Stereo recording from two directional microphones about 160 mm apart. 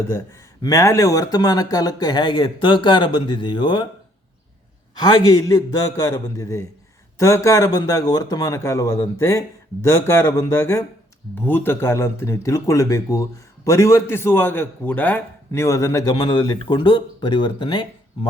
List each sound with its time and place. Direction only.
0.6 s a man's voice: 20° left (ahead or behind)
4.9 s a man's voice: 25° left (ahead or behind)